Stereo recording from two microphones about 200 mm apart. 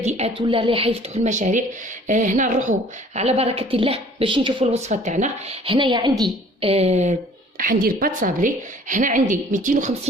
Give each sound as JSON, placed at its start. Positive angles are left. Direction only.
{"t": 0.0, "sound": "a woman's voice", "side_deg": -35}
{"t": 7.6, "sound": "a woman's voice", "side_deg": -45}